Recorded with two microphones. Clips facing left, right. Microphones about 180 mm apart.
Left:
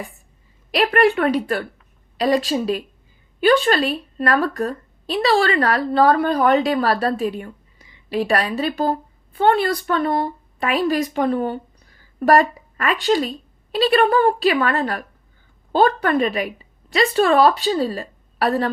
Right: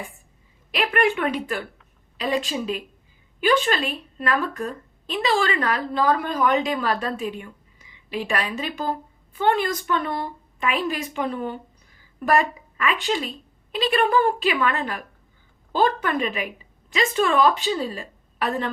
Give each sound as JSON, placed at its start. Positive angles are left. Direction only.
{"t": 0.7, "sound": "a woman's voice", "side_deg": 35}